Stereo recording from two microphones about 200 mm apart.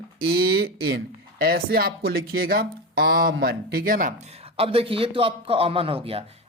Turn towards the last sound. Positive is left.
turn(degrees=-30)  # may be behind; listen again after turning